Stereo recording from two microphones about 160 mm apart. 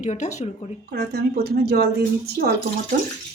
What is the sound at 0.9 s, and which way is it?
A woman's voice, 85° right.